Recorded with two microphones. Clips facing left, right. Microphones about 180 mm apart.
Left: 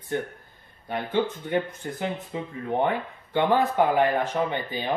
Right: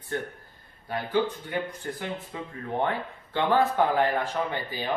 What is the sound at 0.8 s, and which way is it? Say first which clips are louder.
Speech: left 1 dB; 25° left (ahead or behind).